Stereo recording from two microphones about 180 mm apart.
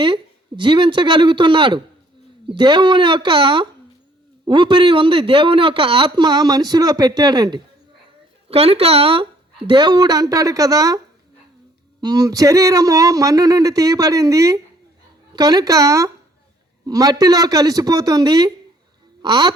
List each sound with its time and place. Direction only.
0.0 s speech: 25° right (ahead or behind)
8.4 s speech: 35° right (ahead or behind)